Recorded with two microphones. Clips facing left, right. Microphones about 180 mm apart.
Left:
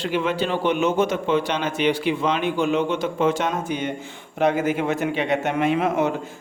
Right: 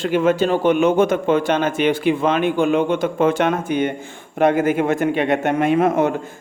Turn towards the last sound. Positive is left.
turn(degrees=-50)  # may be behind; listen again after turning